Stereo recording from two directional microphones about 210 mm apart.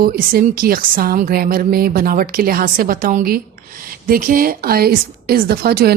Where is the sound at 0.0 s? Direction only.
45° right (ahead or behind).